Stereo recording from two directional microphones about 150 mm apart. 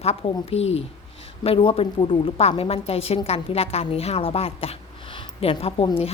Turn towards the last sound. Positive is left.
turn(degrees=40)  # may be behind; listen again after turning